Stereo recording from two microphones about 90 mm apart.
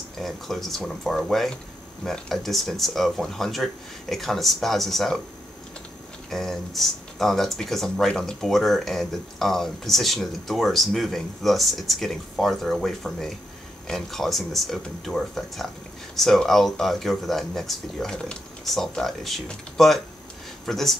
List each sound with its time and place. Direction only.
0.2 s speech: centre (ahead or behind)
6.3 s speech: 5° left (ahead or behind)